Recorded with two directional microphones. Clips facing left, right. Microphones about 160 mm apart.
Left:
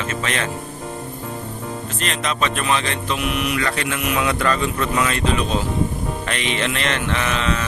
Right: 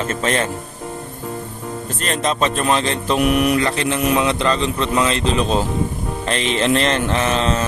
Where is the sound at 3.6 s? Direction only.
30° right (ahead or behind).